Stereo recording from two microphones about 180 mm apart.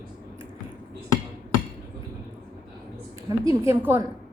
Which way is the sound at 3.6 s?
15° right (ahead or behind).